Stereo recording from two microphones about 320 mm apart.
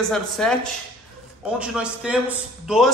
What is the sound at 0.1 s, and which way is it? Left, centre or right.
Speech, centre.